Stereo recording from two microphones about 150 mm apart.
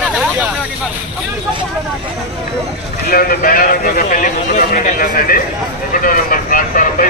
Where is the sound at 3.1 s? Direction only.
75° left (ahead or behind).